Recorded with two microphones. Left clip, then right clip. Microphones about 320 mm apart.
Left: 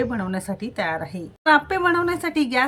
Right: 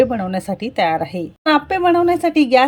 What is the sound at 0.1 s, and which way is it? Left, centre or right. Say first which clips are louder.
Speech: right 6 dB; centre.